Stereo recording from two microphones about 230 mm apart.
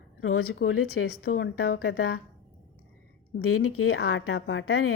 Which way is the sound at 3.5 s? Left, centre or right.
Left.